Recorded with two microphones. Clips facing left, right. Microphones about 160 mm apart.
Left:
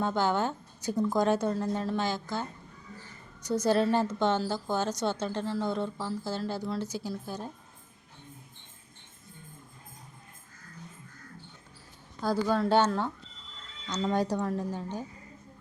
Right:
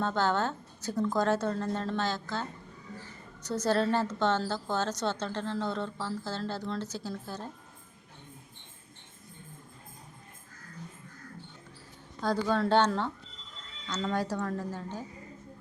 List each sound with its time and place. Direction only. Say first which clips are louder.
0.0 s a woman's voice: left 1 dB; 15° left (ahead or behind)
12.2 s a woman's voice: left 1 dB; 5° left (ahead or behind)